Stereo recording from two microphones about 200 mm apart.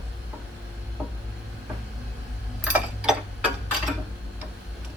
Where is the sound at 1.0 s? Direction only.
5° right (ahead or behind).